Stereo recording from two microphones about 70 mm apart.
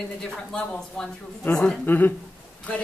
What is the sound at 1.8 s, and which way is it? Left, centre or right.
A woman's voice, left.